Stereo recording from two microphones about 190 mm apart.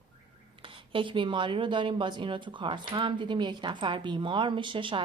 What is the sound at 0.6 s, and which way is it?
Speech, 25° right (ahead or behind).